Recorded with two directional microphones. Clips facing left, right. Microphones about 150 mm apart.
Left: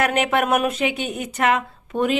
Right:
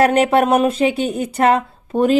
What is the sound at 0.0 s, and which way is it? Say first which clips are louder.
Speech: right 6 dB; 35° right (ahead or behind).